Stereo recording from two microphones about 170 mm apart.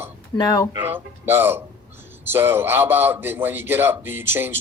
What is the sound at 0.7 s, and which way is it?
A man's voice, 10° right (ahead or behind).